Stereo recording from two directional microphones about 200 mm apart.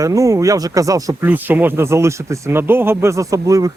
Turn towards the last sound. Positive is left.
turn(degrees=-15)  # may be behind; listen again after turning